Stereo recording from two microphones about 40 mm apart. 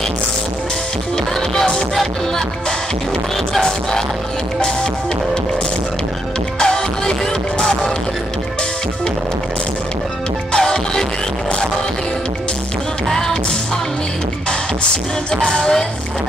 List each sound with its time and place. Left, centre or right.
6.6 s music: centre
10.6 s music: centre
15.3 s music: centre